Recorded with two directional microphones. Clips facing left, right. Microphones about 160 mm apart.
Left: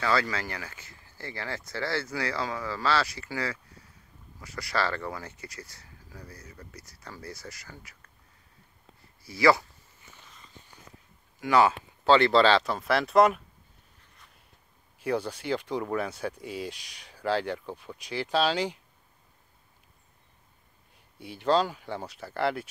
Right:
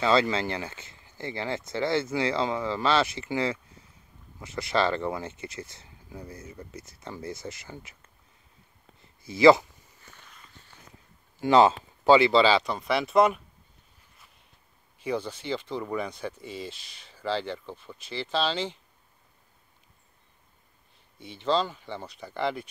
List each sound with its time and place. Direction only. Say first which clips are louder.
0.0 s speech: right 5 dB; 20° right (ahead or behind)
9.2 s speech: right 5 dB; 20° right (ahead or behind)
11.3 s a sound: right 3 dB; 25° right (ahead or behind)
12.1 s speech: right 1 dB; centre (ahead or behind)
15.0 s speech: left 1 dB; 10° left (ahead or behind)
21.2 s speech: left 2 dB; 10° left (ahead or behind)